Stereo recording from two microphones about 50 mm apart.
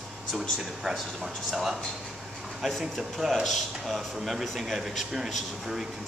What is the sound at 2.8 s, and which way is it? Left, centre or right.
Speech, centre.